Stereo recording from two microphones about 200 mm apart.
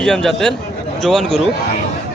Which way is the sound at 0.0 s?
Centre (ahead or behind).